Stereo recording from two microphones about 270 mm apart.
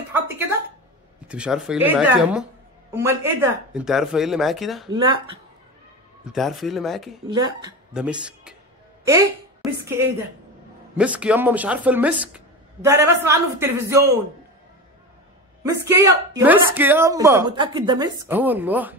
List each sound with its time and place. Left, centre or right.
1.2 s speech: centre
4.9 s speech: centre
6.2 s speech: centre
7.2 s speech: centre
7.9 s speech: centre
15.6 s speech: centre